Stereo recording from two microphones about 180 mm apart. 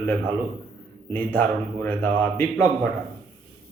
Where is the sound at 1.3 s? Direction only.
10° left (ahead or behind).